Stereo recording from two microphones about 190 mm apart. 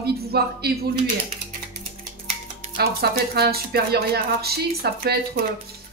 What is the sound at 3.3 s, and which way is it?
A woman's voice, 55° right (ahead or behind).